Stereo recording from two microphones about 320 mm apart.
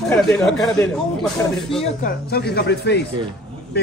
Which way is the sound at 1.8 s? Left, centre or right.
Left.